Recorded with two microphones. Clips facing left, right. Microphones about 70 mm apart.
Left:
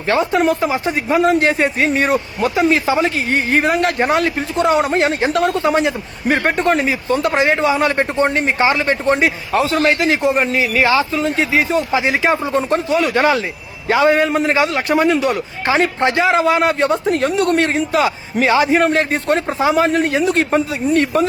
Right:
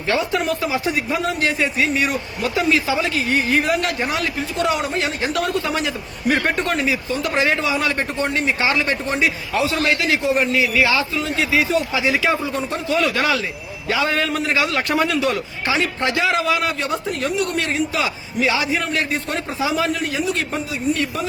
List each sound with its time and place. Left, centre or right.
0.1 s a man's voice: left
7.3 s a man's voice: left